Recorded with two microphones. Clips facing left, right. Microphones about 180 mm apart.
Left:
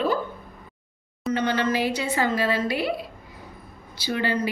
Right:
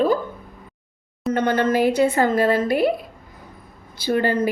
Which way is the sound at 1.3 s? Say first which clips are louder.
Right 4 dB; 50° right (ahead or behind).